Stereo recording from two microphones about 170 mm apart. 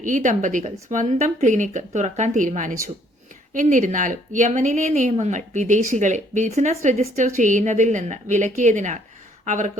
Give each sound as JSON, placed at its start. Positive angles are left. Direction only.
{"t": 0.0, "sound": "speech", "side_deg": -50}